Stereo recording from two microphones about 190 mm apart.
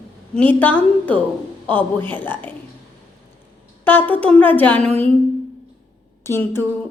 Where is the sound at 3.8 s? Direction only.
10° left (ahead or behind).